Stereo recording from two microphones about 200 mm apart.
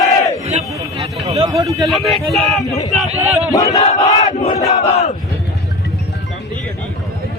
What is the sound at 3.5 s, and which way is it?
Battle cry, 15° left (ahead or behind).